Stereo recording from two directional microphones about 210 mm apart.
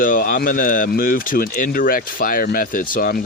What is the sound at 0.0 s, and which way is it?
Speech, 40° left (ahead or behind).